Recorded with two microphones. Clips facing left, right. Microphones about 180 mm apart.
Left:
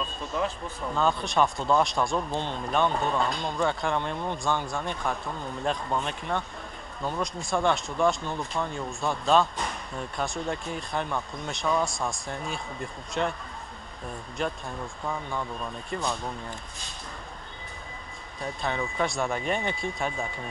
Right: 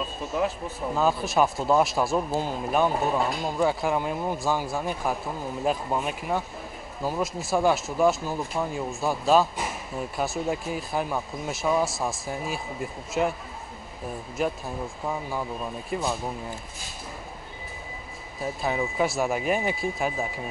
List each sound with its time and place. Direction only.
0.0 s a sound: 5° right (ahead or behind)
0.9 s speech: 5° right (ahead or behind)
14.4 s speech: 5° right (ahead or behind)
14.8 s speech: 20° right (ahead or behind)
15.2 s speech: 5° right (ahead or behind)
18.4 s speech: 5° right (ahead or behind)